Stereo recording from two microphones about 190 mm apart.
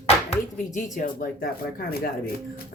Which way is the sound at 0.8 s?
45° left (ahead or behind).